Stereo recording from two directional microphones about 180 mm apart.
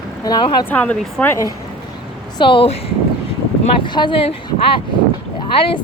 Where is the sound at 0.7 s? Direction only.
10° left (ahead or behind).